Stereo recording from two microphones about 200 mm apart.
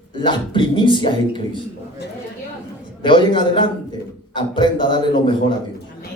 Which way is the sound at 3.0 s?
25° left (ahead or behind).